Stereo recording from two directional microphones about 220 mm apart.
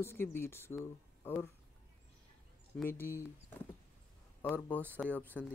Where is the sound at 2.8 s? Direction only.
10° left (ahead or behind).